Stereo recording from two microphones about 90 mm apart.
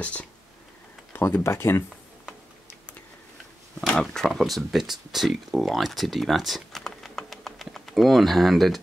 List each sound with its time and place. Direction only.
0.0 s speech: 15° left (ahead or behind)
1.1 s speech: 25° left (ahead or behind)
2.2 s tick-tock: 10° right (ahead or behind)
3.8 s speech: 10° left (ahead or behind)